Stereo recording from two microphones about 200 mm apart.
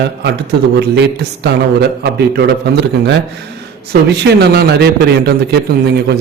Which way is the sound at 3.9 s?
55° right (ahead or behind).